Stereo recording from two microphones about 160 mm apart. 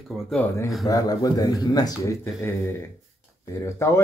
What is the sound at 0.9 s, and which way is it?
A man's voice, 20° left (ahead or behind).